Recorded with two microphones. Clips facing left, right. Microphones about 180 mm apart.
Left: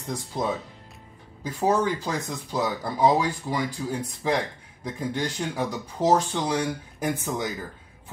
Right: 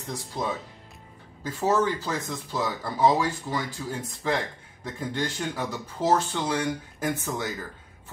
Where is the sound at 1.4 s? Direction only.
15° left (ahead or behind).